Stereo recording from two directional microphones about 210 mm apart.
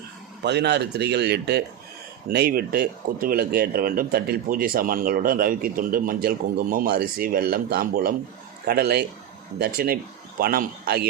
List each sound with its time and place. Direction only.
0.4 s speech: 55° right (ahead or behind)